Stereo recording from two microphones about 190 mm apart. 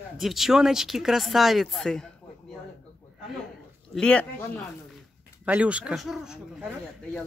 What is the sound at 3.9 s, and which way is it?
Speech, 5° left (ahead or behind).